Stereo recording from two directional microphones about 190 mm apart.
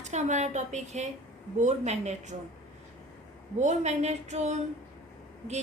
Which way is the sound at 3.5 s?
35° right (ahead or behind).